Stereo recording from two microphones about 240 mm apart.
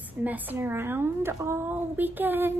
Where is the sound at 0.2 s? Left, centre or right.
Centre.